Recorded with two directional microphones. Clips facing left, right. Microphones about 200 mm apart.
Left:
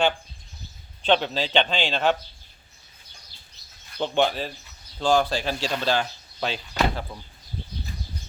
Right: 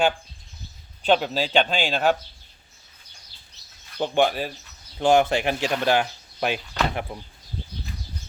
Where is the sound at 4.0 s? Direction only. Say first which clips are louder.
Right 2 dB; 10° right (ahead or behind).